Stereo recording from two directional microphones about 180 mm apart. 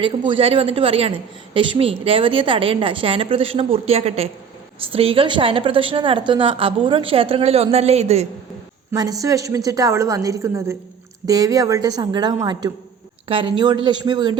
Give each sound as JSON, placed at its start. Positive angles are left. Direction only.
{"t": 0.0, "sound": "a woman's voice", "side_deg": -25}
{"t": 8.9, "sound": "a woman's voice", "side_deg": -20}